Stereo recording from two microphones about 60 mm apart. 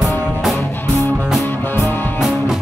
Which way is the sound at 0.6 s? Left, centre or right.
Left.